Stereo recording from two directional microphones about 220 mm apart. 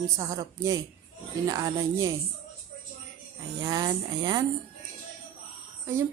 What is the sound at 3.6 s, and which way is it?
Speech, 15° right (ahead or behind).